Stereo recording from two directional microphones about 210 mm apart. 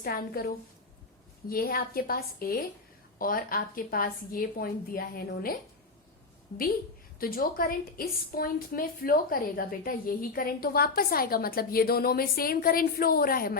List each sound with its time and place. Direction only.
0.0 s a woman's voice: 45° left (ahead or behind)
1.5 s a woman's voice: 45° left (ahead or behind)
7.2 s a woman's voice: 45° left (ahead or behind)